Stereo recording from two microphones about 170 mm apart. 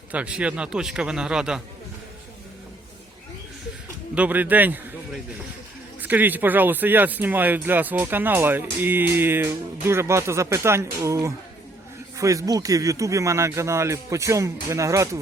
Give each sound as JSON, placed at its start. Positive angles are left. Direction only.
{"t": 0.1, "sound": "a man's voice", "side_deg": -5}
{"t": 4.1, "sound": "speech", "side_deg": -10}
{"t": 6.0, "sound": "speech", "side_deg": -10}